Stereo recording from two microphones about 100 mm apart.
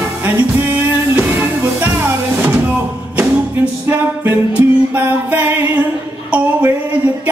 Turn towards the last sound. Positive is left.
turn(degrees=-15)  # may be behind; listen again after turning